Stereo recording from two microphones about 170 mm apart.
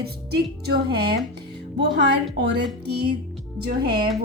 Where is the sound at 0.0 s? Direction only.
70° right (ahead or behind).